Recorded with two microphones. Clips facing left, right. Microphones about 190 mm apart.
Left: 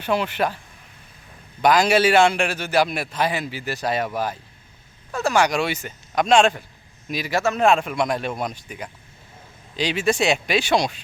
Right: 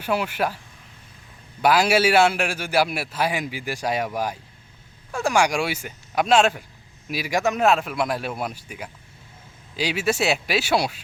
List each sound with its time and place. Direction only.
0.0 s a man's voice: 10° right (ahead or behind)
1.6 s a man's voice: 10° right (ahead or behind)
7.7 s a man's voice: 5° right (ahead or behind)